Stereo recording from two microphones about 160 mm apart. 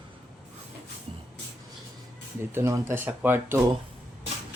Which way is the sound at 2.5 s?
15° right (ahead or behind).